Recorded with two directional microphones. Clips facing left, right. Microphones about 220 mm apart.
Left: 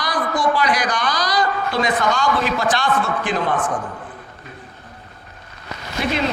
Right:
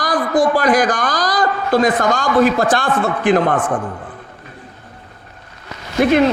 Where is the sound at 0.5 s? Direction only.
50° right (ahead or behind).